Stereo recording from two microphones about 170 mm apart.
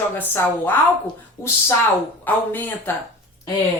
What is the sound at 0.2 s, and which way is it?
Speech, 10° left (ahead or behind).